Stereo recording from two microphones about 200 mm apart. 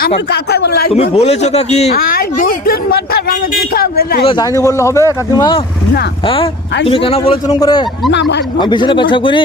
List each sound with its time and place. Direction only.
0.3 s speech: 55° left (ahead or behind)
0.9 s a man's voice: 30° left (ahead or behind)
1.9 s speech: 45° left (ahead or behind)
4.3 s a man's voice: 20° left (ahead or behind)
8.1 s speech: 60° left (ahead or behind)
8.5 s a man's voice: 20° left (ahead or behind)